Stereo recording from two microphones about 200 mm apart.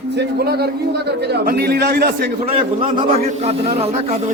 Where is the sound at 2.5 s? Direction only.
30° right (ahead or behind).